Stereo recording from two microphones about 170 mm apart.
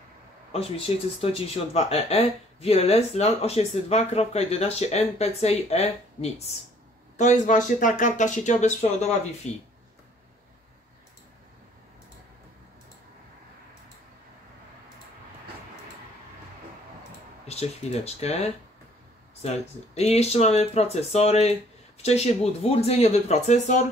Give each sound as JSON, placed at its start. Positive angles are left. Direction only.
{"t": 0.5, "sound": "speech", "side_deg": 35}
{"t": 17.5, "sound": "speech", "side_deg": 40}